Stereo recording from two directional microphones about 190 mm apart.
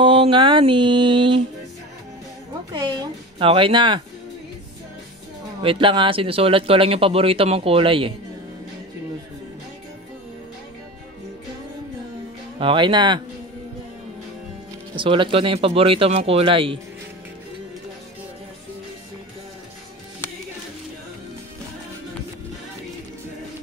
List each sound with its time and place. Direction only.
0.0 s speech: 25° right (ahead or behind)
2.7 s speech: 20° right (ahead or behind)
5.6 s speech: 30° right (ahead or behind)
12.5 s speech: 25° right (ahead or behind)
15.0 s speech: 25° right (ahead or behind)